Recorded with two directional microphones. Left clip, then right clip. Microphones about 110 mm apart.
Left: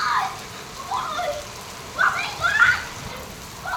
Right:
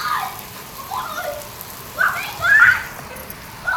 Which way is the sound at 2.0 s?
40° right (ahead or behind).